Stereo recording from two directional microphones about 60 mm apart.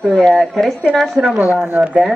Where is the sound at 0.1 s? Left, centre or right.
Centre.